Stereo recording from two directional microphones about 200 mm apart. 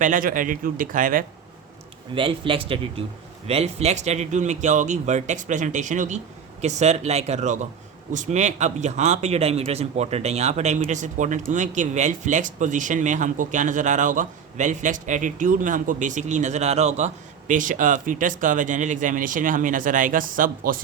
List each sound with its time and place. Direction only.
0.0 s speech: 40° right (ahead or behind)
2.1 s a man's voice: 25° right (ahead or behind); by 20.8 s 45° right (ahead or behind)